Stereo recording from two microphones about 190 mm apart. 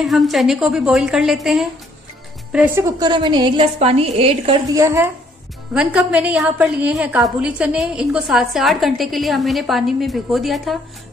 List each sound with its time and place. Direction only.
0.0 s a woman's voice: centre (ahead or behind)
2.5 s a woman's voice: 10° right (ahead or behind); by 4.6 s 30° right (ahead or behind)
4.7 s a woman's voice: 15° right (ahead or behind)